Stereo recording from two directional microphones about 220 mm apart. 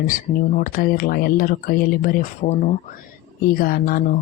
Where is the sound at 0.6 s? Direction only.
40° left (ahead or behind).